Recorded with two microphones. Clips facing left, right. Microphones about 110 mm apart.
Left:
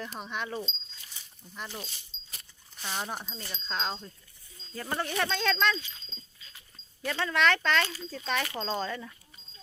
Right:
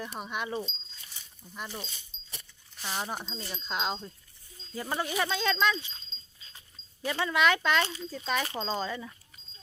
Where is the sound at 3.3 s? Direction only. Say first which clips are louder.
Right 1 dB; 15° right (ahead or behind).